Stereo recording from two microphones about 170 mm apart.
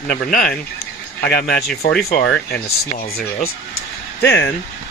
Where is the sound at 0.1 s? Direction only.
60° left (ahead or behind).